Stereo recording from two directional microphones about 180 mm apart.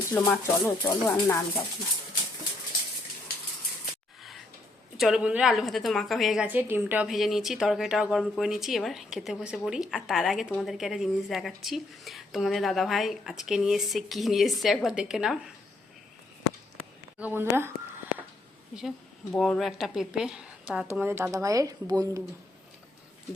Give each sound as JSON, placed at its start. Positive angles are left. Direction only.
{"t": 0.1, "sound": "speech", "side_deg": 15}
{"t": 4.2, "sound": "a sound", "side_deg": 0}
{"t": 4.9, "sound": "a woman's voice", "side_deg": 0}
{"t": 17.2, "sound": "a woman's voice", "side_deg": -10}